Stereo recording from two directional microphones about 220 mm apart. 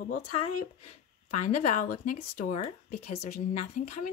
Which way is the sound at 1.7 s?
35° left (ahead or behind).